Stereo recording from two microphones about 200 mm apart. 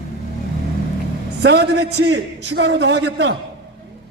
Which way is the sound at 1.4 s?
55° right (ahead or behind).